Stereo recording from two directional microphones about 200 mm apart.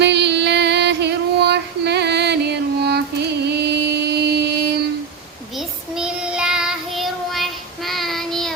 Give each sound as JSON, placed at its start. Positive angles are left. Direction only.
{"t": 0.0, "sound": "music", "side_deg": -60}
{"t": 3.4, "sound": "mantra", "side_deg": -55}
{"t": 5.5, "sound": "child singing", "side_deg": -5}